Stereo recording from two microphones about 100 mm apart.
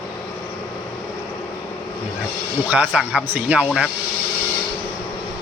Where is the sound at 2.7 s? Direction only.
10° right (ahead or behind).